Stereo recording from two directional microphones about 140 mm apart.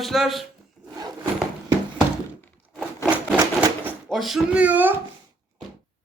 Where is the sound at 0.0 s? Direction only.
Centre (ahead or behind).